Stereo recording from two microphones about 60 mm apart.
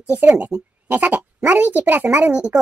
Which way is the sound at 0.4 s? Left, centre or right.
Right.